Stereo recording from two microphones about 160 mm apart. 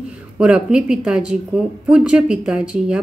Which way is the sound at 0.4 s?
5° right (ahead or behind).